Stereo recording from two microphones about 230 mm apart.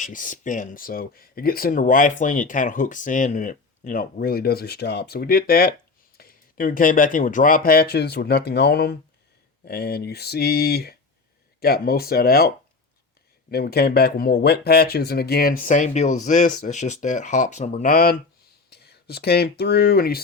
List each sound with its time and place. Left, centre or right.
0.0 s speech: left